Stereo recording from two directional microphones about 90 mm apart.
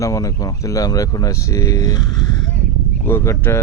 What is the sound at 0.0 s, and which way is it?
Speech, 40° left (ahead or behind).